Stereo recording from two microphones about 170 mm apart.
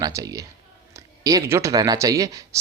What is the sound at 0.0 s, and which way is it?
Speech, 20° right (ahead or behind).